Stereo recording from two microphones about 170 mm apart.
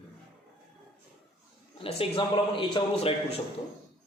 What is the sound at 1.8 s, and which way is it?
A man's voice, 35° left (ahead or behind).